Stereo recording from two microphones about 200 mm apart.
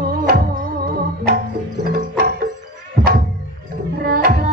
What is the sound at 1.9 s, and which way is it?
Music, 45° right (ahead or behind).